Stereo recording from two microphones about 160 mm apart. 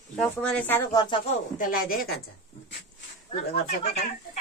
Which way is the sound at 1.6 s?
65° left (ahead or behind).